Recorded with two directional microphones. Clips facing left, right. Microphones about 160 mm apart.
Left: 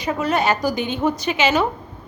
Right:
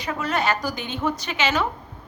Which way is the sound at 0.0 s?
15° left (ahead or behind).